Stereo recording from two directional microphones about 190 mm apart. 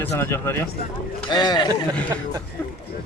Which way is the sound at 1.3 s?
20° left (ahead or behind).